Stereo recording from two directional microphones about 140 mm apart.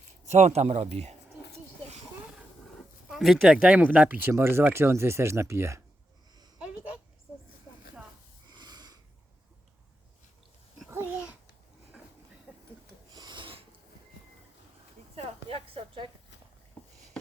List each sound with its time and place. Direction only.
0.3 s speech: 55° right (ahead or behind)
3.1 s speech: centre (ahead or behind); by 5.8 s 20° right (ahead or behind)
8.4 s wheeze: 30° right (ahead or behind)
10.8 s babbling: 15° right (ahead or behind)
12.5 s a sound: 10° right (ahead or behind)
13.1 s filing: 35° right (ahead or behind)
15.1 s a sound: 45° right (ahead or behind)